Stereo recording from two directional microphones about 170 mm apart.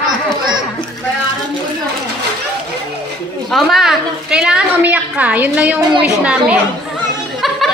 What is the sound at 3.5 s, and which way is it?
A woman's voice, centre (ahead or behind).